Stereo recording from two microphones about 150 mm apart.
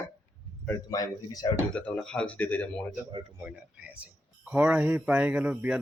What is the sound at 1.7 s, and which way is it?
Speech, 5° left (ahead or behind).